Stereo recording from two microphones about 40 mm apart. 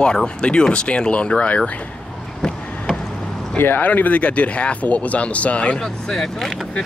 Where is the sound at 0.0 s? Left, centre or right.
Left.